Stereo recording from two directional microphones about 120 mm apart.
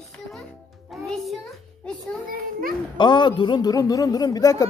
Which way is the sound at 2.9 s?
40° left (ahead or behind).